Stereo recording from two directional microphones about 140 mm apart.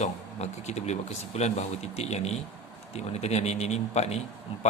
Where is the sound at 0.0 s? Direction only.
50° left (ahead or behind).